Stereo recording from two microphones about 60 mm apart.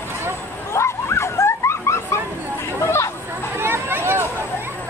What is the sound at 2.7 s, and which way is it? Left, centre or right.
Chatter, left.